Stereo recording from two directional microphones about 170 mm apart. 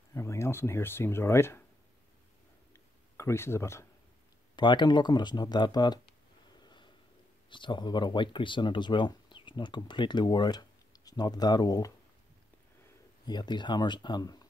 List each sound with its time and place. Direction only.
0.1 s speech: 15° left (ahead or behind)
3.2 s speech: 15° left (ahead or behind)
4.6 s speech: 25° left (ahead or behind)
6.6 s a sound: 25° left (ahead or behind)
7.4 s speech: 30° left (ahead or behind)
13.2 s speech: 25° left (ahead or behind)